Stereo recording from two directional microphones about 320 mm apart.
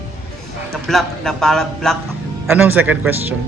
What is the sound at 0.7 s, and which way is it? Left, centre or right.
A man's voice, centre.